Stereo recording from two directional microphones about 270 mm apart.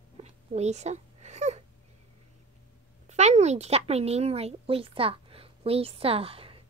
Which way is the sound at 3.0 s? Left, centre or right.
Right.